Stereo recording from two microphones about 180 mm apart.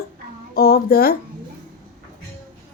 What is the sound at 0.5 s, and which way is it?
Speech, 55° left (ahead or behind).